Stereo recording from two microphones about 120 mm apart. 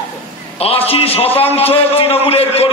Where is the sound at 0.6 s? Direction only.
55° left (ahead or behind).